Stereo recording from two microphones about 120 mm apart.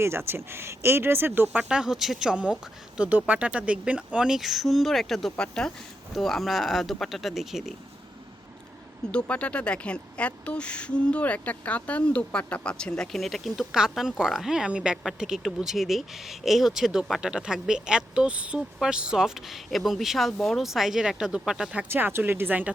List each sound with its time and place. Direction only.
0.0 s speech: 20° right (ahead or behind); by 7.7 s centre (ahead or behind)
9.1 s speech: 10° left (ahead or behind); by 22.7 s 15° right (ahead or behind)